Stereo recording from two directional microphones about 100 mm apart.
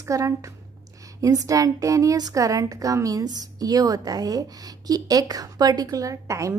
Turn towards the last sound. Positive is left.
turn(degrees=-30)  # may be behind; listen again after turning